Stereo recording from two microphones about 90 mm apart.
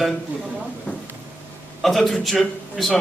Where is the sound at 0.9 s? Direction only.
15° left (ahead or behind).